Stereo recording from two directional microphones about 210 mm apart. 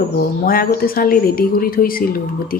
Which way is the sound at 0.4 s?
45° left (ahead or behind).